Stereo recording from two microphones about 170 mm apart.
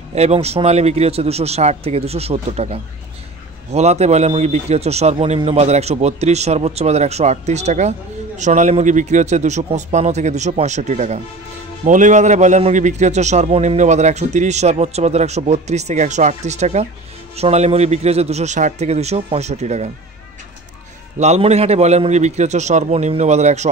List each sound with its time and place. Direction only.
0.1 s a man's voice: 40° right (ahead or behind)
21.2 s a man's voice: 40° right (ahead or behind)